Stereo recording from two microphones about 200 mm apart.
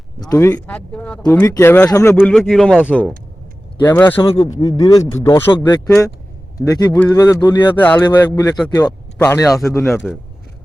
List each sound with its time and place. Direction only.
0.2 s speech: 15° left (ahead or behind)
4.1 s speech: 25° left (ahead or behind)